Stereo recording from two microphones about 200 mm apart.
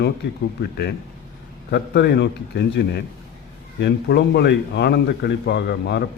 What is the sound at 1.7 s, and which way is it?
A man's voice, 55° left (ahead or behind).